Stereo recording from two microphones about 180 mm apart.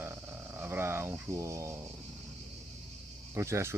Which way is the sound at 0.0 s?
15° right (ahead or behind).